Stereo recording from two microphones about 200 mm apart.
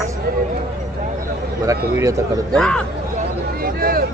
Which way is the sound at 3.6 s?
45° right (ahead or behind).